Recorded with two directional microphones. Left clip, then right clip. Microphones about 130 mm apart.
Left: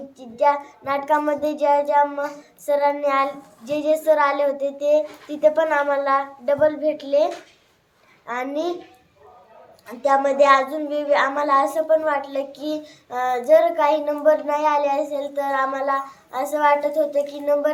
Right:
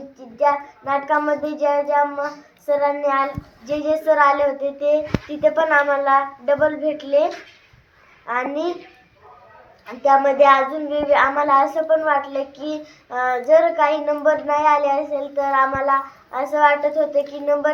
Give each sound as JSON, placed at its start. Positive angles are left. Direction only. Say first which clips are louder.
{"t": 0.2, "sound": "child singing", "louder": "even", "side_deg": 20}
{"t": 8.3, "sound": "speech", "louder": "right 3 dB", "side_deg": 15}
{"t": 9.8, "sound": "speech", "louder": "right 3 dB", "side_deg": 15}
{"t": 13.5, "sound": "child singing", "louder": "right 1 dB", "side_deg": 25}